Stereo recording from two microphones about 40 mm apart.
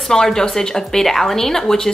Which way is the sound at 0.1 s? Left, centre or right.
Centre.